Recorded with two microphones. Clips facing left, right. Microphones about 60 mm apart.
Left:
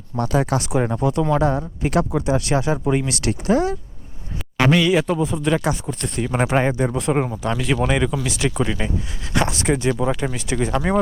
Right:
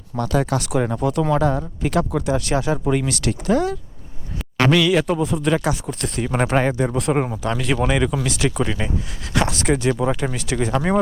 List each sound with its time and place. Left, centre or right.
0.3 s a man's voice: centre
4.9 s speech: centre